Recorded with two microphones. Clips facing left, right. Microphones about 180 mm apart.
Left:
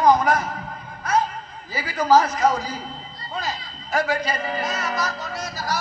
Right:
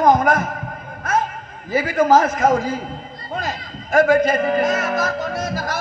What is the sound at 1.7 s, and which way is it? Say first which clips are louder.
A man's voice: right 4 dB; 50° right (ahead or behind).